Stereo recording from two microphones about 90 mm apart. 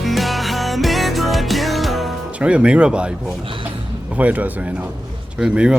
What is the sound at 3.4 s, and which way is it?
Speech, 80° right.